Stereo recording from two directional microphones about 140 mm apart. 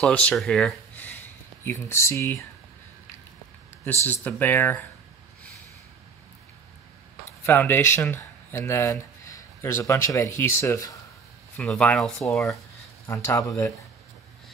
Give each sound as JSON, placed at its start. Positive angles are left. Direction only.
{"t": 0.0, "sound": "speech", "side_deg": 5}
{"t": 4.1, "sound": "speech", "side_deg": 15}
{"t": 7.4, "sound": "speech", "side_deg": 15}
{"t": 11.6, "sound": "speech", "side_deg": 10}
{"t": 13.0, "sound": "speech", "side_deg": 20}